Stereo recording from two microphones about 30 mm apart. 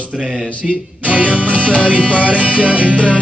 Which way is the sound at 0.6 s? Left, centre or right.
Right.